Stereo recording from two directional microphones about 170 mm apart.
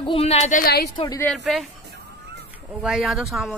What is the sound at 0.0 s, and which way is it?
Speech, 35° left (ahead or behind).